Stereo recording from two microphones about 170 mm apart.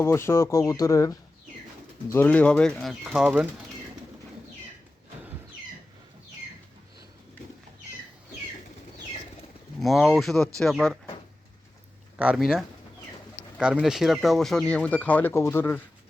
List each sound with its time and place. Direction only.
0.0 s speech: 15° left (ahead or behind)
2.1 s speech: 10° left (ahead or behind); by 3.5 s 5° right (ahead or behind)
9.8 s speech: centre (ahead or behind)
12.1 s speech: 5° right (ahead or behind); by 15.8 s 15° left (ahead or behind)